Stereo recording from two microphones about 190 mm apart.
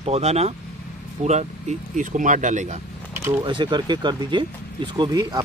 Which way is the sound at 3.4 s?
25° right (ahead or behind).